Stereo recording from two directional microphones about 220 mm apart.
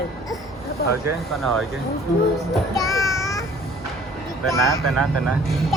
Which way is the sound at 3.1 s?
15° left (ahead or behind).